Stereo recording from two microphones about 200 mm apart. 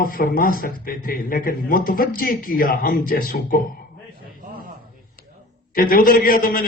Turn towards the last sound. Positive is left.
turn(degrees=45)  # may be behind; listen again after turning